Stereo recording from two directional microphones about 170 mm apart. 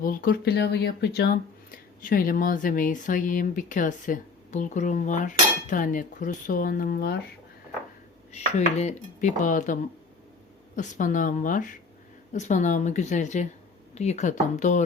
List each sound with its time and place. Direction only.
0.0 s speech: 55° left (ahead or behind)
8.3 s speech: 40° left (ahead or behind)
10.8 s speech: 45° left (ahead or behind)